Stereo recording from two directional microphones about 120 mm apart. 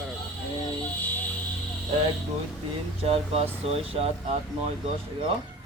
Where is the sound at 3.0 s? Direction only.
55° right (ahead or behind).